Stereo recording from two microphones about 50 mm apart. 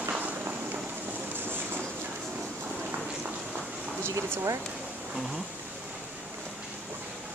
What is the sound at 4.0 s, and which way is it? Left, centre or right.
Speech, right.